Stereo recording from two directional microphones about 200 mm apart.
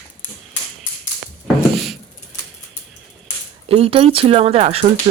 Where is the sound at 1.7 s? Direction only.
Centre (ahead or behind).